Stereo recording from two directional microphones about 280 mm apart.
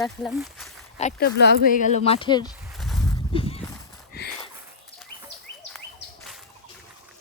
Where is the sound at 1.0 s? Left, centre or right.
Left.